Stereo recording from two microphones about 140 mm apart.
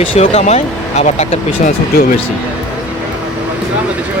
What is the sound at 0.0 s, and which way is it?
Speech, 45° left (ahead or behind).